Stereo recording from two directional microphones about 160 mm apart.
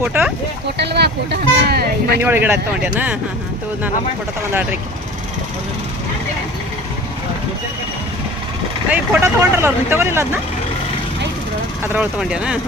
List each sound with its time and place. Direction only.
0.0 s speech: 5° right (ahead or behind)
0.8 s speech: 90° right
2.2 s speech: 15° right (ahead or behind)
8.9 s speech: 10° right (ahead or behind)
11.8 s speech: 15° right (ahead or behind)